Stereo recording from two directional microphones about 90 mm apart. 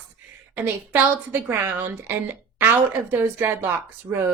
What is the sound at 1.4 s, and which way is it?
Speech, 20° right (ahead or behind).